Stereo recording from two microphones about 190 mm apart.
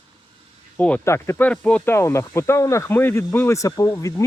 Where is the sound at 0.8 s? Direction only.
10° left (ahead or behind).